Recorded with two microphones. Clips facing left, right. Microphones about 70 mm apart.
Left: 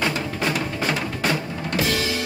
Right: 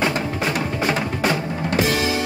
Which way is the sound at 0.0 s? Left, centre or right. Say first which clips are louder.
Right 2 dB; centre.